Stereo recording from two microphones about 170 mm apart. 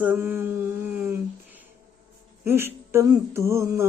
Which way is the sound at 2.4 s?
15° right (ahead or behind).